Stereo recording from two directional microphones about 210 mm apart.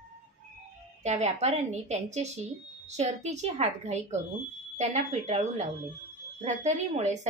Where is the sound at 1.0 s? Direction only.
30° right (ahead or behind).